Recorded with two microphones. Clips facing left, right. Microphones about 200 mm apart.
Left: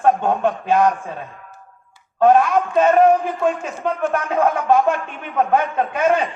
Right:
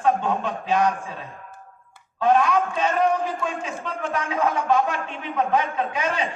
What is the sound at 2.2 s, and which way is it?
A man's voice, 50° left (ahead or behind).